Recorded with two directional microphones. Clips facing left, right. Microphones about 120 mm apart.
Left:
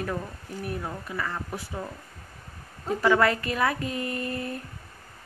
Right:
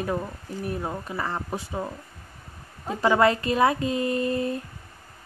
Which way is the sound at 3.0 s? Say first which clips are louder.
Right 2 dB; 25° right (ahead or behind).